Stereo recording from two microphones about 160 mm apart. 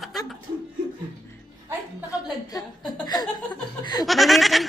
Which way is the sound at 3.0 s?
25° left (ahead or behind).